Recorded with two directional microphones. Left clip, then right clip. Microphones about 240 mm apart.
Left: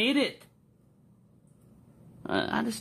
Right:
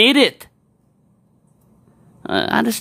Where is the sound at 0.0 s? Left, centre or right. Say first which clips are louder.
Right 14 dB; right.